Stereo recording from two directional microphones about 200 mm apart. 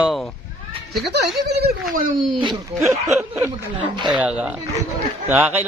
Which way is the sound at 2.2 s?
Centre (ahead or behind).